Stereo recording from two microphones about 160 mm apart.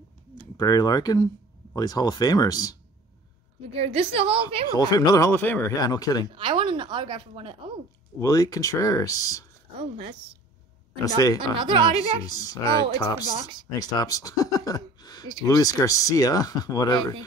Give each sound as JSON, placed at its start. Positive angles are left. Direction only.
{"t": 0.6, "sound": "speech", "side_deg": 25}
{"t": 3.7, "sound": "speech", "side_deg": -40}
{"t": 4.7, "sound": "speech", "side_deg": 25}
{"t": 5.8, "sound": "speech", "side_deg": 25}
{"t": 6.3, "sound": "speech", "side_deg": -30}
{"t": 8.2, "sound": "speech", "side_deg": 20}
{"t": 9.8, "sound": "speech", "side_deg": -35}
{"t": 11.1, "sound": "speech", "side_deg": 25}
{"t": 11.6, "sound": "speech", "side_deg": -35}
{"t": 12.3, "sound": "speech", "side_deg": 25}